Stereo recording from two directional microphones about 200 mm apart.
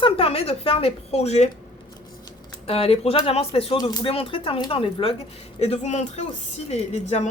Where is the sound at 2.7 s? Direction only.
30° left (ahead or behind).